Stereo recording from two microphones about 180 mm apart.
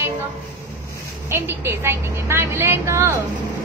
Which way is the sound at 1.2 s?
15° right (ahead or behind).